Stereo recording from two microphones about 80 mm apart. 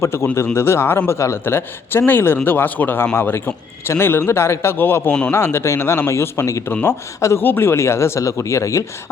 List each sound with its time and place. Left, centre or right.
0.0 s a man's voice: left